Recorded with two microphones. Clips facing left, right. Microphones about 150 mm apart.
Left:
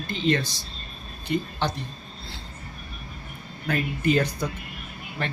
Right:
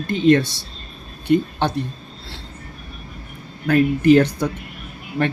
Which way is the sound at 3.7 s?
70° right (ahead or behind).